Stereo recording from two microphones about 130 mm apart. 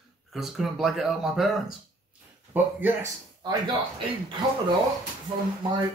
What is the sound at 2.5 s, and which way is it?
Speech, 15° right (ahead or behind).